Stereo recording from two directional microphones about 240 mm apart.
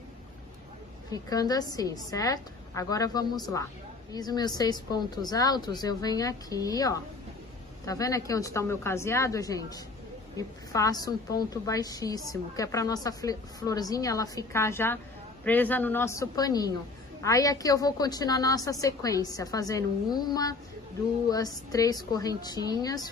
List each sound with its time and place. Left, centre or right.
1.1 s a woman's voice: centre